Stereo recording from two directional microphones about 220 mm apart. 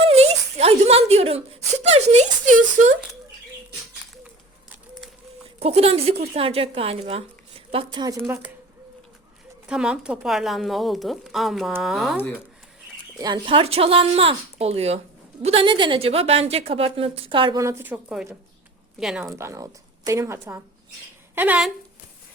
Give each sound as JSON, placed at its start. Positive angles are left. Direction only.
{"t": 0.1, "sound": "whimper", "side_deg": -30}
{"t": 5.5, "sound": "speech", "side_deg": -25}
{"t": 9.6, "sound": "speech", "side_deg": -5}
{"t": 13.1, "sound": "speech", "side_deg": -20}
{"t": 19.2, "sound": "a woman's voice", "side_deg": -15}